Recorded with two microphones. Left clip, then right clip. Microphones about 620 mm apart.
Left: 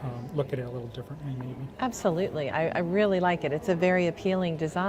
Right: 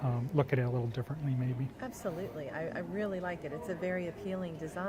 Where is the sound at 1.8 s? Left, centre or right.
Left.